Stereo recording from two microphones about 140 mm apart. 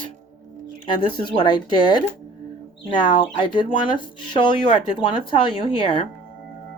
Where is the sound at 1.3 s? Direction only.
35° left (ahead or behind).